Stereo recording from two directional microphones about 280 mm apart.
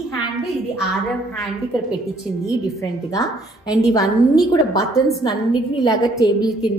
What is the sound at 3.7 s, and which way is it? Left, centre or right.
A woman's voice, centre.